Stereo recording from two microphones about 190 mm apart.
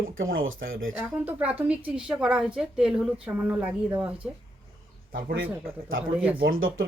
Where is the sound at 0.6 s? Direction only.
50° right (ahead or behind).